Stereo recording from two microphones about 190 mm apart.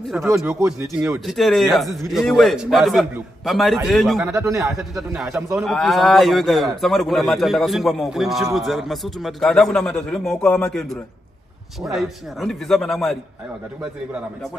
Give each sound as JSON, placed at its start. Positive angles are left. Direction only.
{"t": 0.1, "sound": "speech", "side_deg": -10}
{"t": 1.2, "sound": "a man's voice", "side_deg": 0}
{"t": 4.2, "sound": "speech", "side_deg": -15}
{"t": 4.6, "sound": "a man's voice", "side_deg": 0}